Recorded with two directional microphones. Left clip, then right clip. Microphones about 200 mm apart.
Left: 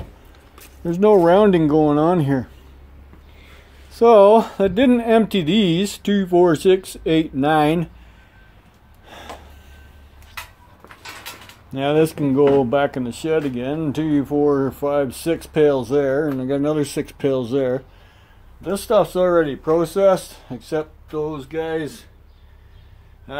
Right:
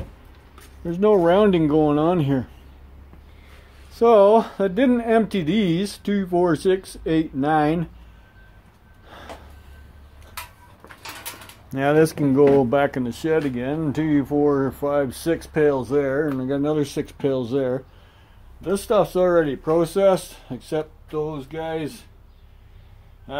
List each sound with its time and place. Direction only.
0.8 s speech: 25° left (ahead or behind)
3.9 s speech: 15° left (ahead or behind)
9.0 s gasp: 15° left (ahead or behind)
11.7 s speech: 5° right (ahead or behind)